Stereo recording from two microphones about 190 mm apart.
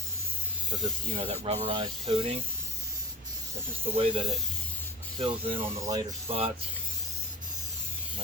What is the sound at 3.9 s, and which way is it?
Speech, 30° right (ahead or behind).